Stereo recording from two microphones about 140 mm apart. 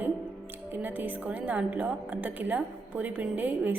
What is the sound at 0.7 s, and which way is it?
A woman's voice, 15° right (ahead or behind).